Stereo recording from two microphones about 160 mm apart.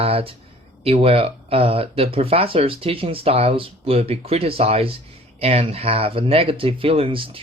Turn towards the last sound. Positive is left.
turn(degrees=-35)  # may be behind; listen again after turning